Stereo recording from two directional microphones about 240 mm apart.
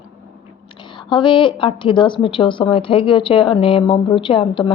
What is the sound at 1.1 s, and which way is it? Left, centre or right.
A woman's voice, left.